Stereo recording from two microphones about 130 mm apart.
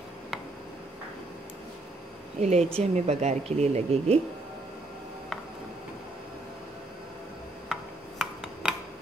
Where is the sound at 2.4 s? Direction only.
55° right (ahead or behind).